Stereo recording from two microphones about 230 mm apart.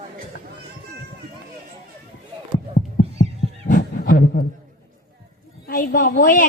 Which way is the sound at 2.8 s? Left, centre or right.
Left.